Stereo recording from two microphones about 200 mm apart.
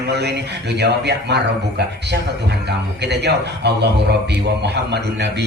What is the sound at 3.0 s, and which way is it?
A man's voice, 60° right (ahead or behind).